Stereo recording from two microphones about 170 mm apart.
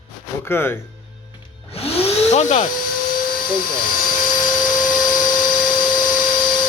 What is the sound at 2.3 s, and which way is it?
Speech, 40° left (ahead or behind).